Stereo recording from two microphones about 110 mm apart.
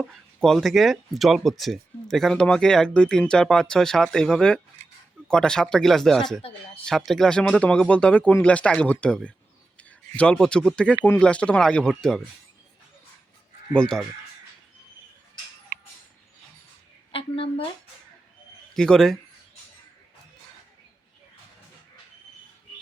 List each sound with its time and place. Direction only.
0.4 s speech: centre (ahead or behind)
13.7 s speech: 5° left (ahead or behind)
17.1 s a woman's voice: 55° left (ahead or behind)
18.7 s speech: 5° left (ahead or behind)